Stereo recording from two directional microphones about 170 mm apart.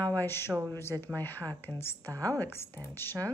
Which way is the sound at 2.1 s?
20° right (ahead or behind).